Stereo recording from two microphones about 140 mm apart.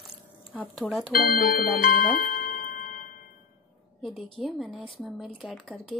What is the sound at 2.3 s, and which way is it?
Music, 90° left.